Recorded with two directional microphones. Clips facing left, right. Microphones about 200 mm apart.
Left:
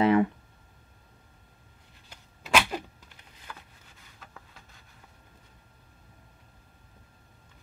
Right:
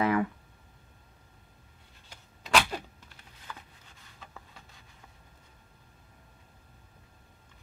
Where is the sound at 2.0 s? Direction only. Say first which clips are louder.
Left 2 dB; 5° left (ahead or behind).